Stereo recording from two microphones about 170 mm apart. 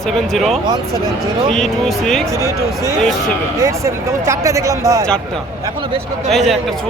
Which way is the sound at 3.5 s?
20° right (ahead or behind).